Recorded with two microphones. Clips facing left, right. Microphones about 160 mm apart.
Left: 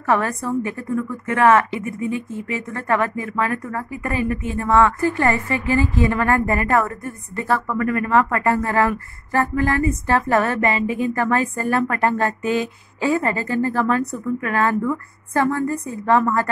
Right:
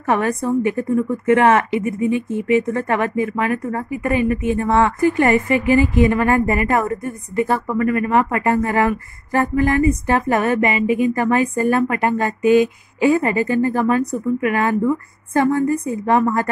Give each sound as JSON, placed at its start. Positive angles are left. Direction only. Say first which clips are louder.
{"t": 0.0, "sound": "a woman's voice", "louder": "right 2 dB", "side_deg": -20}